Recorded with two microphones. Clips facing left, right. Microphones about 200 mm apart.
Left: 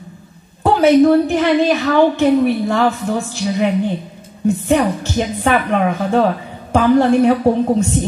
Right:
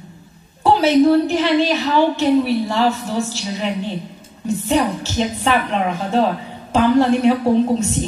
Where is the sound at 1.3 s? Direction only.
55° left (ahead or behind).